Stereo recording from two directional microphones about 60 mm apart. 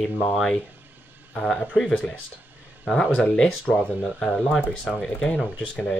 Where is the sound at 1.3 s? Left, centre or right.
Centre.